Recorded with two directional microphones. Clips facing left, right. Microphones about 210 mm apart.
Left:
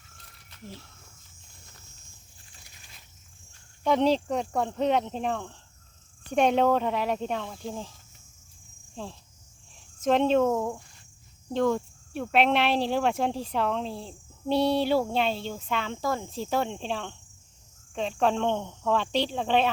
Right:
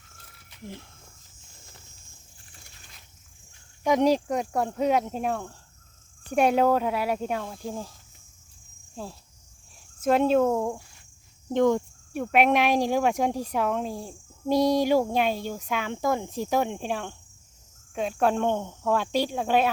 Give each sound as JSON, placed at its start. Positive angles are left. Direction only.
{"t": 0.5, "sound": "speech", "side_deg": -15}
{"t": 3.8, "sound": "speech", "side_deg": -10}
{"t": 10.0, "sound": "speech", "side_deg": -5}